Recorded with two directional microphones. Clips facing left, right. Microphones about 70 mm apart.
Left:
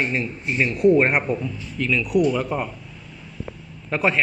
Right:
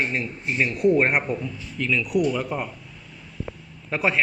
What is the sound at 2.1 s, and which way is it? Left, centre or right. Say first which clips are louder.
Speech: left 3 dB; left.